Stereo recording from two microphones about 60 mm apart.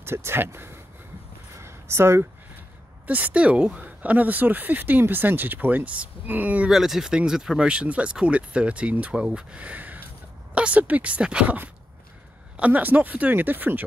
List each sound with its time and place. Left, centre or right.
0.0 s speech: right
1.6 s a sound: right
3.1 s speech: right
6.7 s speech: centre
7.6 s speech: centre
11.4 s speech: right